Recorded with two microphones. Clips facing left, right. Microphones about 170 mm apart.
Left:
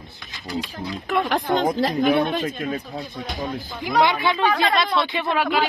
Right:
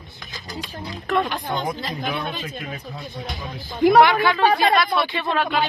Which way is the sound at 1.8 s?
60° left (ahead or behind).